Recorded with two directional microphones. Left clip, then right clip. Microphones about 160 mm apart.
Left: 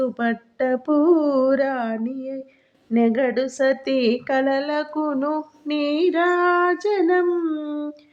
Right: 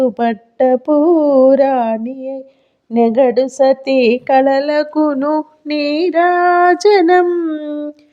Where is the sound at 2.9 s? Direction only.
40° right (ahead or behind); by 7.2 s 70° right (ahead or behind).